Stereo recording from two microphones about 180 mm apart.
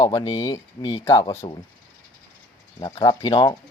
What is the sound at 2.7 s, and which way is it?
Speech, 25° left (ahead or behind).